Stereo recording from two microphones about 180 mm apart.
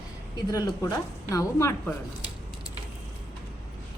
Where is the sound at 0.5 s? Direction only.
20° left (ahead or behind).